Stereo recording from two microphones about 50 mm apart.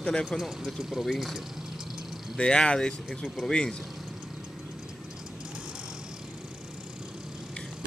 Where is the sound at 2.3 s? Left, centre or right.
Centre.